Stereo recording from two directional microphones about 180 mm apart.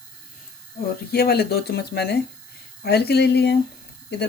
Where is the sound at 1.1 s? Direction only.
60° left (ahead or behind).